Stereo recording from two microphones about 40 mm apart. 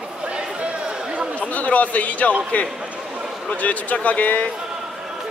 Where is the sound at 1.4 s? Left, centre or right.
Left.